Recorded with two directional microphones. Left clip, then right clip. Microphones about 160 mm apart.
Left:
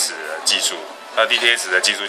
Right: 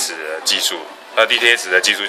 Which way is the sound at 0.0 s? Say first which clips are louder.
Right 1 dB; 45° right (ahead or behind).